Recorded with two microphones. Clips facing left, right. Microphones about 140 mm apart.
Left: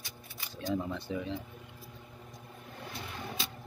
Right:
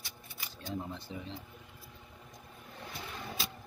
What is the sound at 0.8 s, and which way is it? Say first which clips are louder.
Speech: left 7 dB; 80° left.